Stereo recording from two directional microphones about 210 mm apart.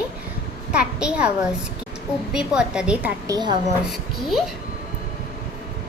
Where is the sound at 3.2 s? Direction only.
20° right (ahead or behind).